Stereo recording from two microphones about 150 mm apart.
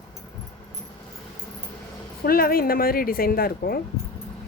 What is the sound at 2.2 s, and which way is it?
A woman's voice, 80° left.